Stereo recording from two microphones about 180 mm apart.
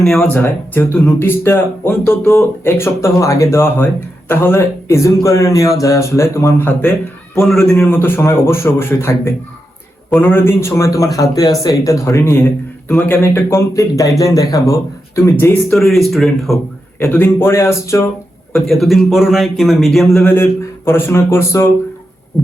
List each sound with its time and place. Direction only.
0.0 s a man's voice: centre (ahead or behind)
7.3 s speech: centre (ahead or behind)
15.7 s a man's voice: centre (ahead or behind)
17.0 s speech: 10° left (ahead or behind)
18.5 s a man's voice: centre (ahead or behind)